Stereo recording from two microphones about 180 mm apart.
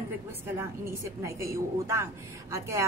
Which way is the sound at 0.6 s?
15° right (ahead or behind).